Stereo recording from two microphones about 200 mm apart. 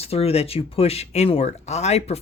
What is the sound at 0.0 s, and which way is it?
Speech, 30° left (ahead or behind).